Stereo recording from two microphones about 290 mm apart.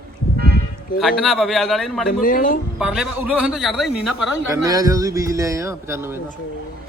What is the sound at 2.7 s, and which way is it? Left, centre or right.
A man's voice, centre.